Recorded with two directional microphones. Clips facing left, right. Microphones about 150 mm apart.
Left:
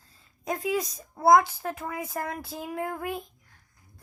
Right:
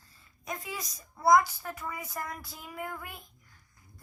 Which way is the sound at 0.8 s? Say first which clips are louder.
Left 8 dB; 30° left (ahead or behind).